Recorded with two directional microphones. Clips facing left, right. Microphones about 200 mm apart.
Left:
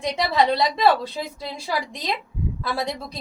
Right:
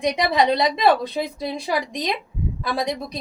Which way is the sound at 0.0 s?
15° right (ahead or behind).